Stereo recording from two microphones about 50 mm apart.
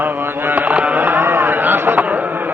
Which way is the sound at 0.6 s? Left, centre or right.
Right.